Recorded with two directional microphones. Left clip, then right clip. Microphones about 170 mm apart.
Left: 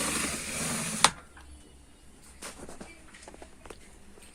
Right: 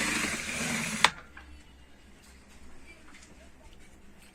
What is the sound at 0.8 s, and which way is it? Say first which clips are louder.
Sewing machine: even; 75° left (ahead or behind).